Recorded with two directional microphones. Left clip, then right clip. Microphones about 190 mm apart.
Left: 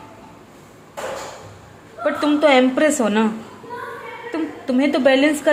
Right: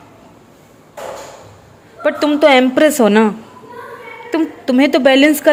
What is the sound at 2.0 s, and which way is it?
A woman's voice, 45° right (ahead or behind).